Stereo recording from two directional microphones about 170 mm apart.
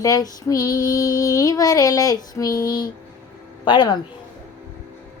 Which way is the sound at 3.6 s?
25° left (ahead or behind).